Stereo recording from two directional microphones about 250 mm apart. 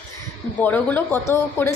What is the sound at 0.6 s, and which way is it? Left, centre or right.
A woman's voice, centre.